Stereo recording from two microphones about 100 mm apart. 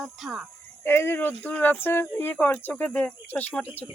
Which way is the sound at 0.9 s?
25° left (ahead or behind).